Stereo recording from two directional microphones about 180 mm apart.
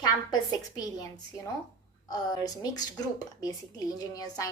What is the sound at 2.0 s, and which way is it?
Speech, 20° left (ahead or behind).